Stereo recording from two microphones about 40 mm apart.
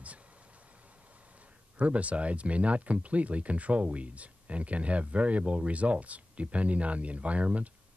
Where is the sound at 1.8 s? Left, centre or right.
Right.